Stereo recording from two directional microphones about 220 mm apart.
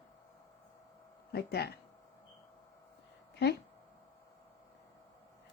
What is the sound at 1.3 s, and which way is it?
Speech, 45° left (ahead or behind).